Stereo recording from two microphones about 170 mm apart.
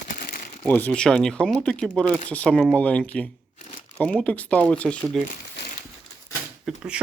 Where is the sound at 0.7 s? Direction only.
10° left (ahead or behind).